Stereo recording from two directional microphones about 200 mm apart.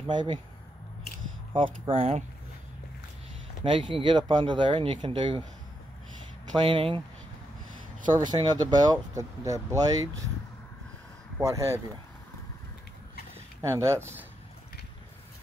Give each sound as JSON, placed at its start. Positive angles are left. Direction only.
{"t": 0.0, "sound": "speech", "side_deg": -25}
{"t": 1.5, "sound": "speech", "side_deg": -25}
{"t": 3.6, "sound": "speech", "side_deg": -25}
{"t": 6.6, "sound": "speech", "side_deg": -30}
{"t": 8.2, "sound": "speech", "side_deg": -20}
{"t": 11.3, "sound": "speech", "side_deg": -15}
{"t": 13.6, "sound": "speech", "side_deg": -15}